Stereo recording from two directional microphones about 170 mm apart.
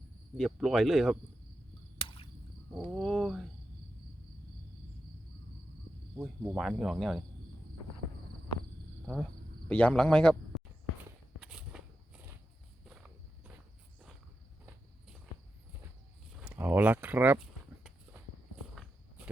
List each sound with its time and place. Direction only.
0.3 s speech: centre (ahead or behind)
2.0 s a sound: 30° left (ahead or behind)
2.7 s speech: centre (ahead or behind)
6.1 s cricket: 15° right (ahead or behind)
6.6 s speech: centre (ahead or behind)
9.0 s speech: 5° left (ahead or behind)
11.3 s walk: 5° right (ahead or behind)
12.9 s walk: 5° right (ahead or behind)
16.4 s speech: 10° right (ahead or behind)